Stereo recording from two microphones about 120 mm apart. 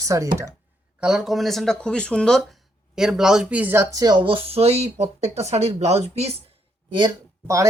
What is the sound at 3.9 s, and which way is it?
Speech, 35° right (ahead or behind).